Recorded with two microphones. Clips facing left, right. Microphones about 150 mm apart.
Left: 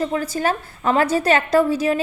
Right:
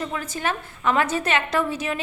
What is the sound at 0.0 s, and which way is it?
A woman's voice, 35° left (ahead or behind).